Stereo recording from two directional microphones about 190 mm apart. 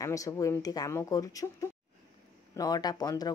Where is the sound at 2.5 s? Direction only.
20° left (ahead or behind).